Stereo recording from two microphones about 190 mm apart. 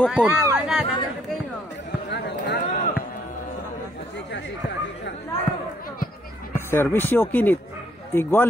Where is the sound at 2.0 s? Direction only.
60° left (ahead or behind).